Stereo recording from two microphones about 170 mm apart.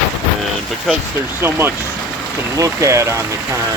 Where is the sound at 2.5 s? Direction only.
20° right (ahead or behind).